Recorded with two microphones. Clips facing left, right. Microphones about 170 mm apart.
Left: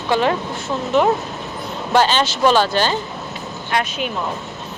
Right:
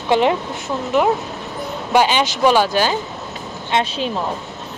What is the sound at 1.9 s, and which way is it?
Speech, 15° right (ahead or behind).